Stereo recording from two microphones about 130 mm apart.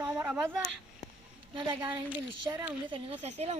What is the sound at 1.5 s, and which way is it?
Speech, 40° right (ahead or behind).